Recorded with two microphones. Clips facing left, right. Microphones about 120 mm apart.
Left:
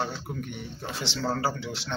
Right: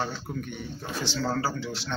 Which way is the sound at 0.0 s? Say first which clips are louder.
Even; 25° left (ahead or behind).